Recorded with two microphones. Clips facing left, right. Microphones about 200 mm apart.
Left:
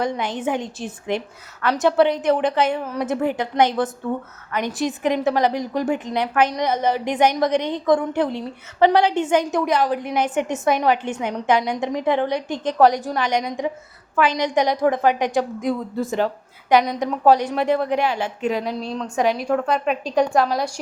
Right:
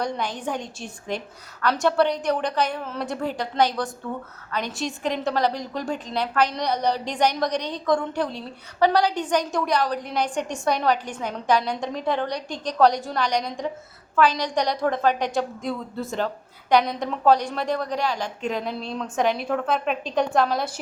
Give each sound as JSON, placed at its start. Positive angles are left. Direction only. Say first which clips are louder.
{"t": 0.0, "sound": "a woman's voice", "louder": "left 4 dB", "side_deg": 20}
{"t": 16.8, "sound": "a woman's voice", "louder": "left 4 dB", "side_deg": 10}
{"t": 18.9, "sound": "a woman's voice", "louder": "left 2 dB", "side_deg": 0}